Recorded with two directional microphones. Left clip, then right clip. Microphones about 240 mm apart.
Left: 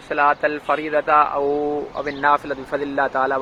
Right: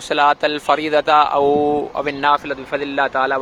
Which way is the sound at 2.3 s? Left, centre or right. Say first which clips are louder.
Right 2 dB; centre.